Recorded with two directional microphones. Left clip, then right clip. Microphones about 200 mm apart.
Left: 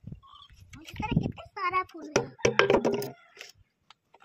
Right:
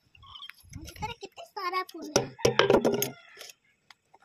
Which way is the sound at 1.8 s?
15° left (ahead or behind).